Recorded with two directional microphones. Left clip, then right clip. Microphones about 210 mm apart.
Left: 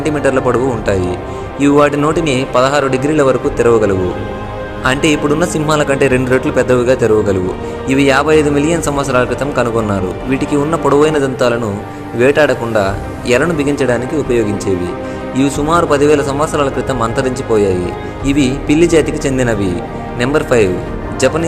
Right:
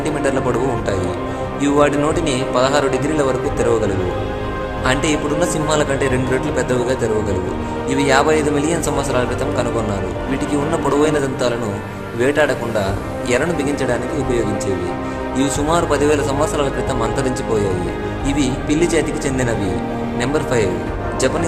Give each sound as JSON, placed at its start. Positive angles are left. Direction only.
{"t": 0.0, "sound": "speech", "side_deg": 20}
{"t": 10.8, "sound": "speech", "side_deg": 20}